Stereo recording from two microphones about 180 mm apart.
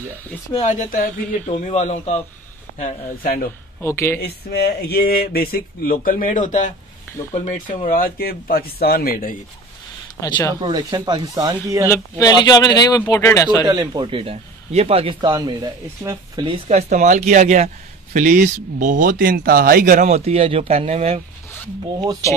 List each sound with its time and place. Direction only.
0.5 s a man's voice: 40° left (ahead or behind)
2.8 s speech: 55° left (ahead or behind)
3.8 s speech: 15° left (ahead or behind)
4.2 s speech: 60° left (ahead or behind)
10.2 s speech: 20° left (ahead or behind)
10.5 s speech: 20° right (ahead or behind)
11.9 s speech: 20° left (ahead or behind)
13.7 s speech: 25° right (ahead or behind)
16.4 s speech: 35° right (ahead or behind)